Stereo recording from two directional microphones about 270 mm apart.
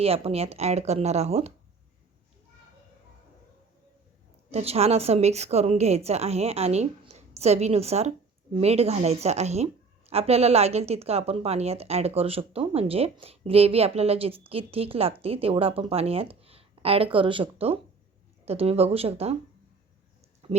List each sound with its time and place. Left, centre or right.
0.0 s a woman's voice: right
4.5 s a woman's voice: right
20.4 s speech: right